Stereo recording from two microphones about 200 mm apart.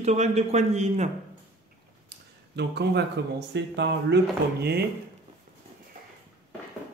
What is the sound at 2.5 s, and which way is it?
Speech, 55° right (ahead or behind).